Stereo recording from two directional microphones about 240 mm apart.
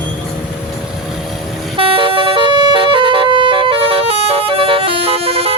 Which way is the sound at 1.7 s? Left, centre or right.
Right.